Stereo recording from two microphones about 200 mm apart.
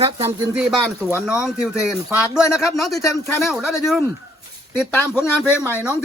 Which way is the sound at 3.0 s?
15° left (ahead or behind).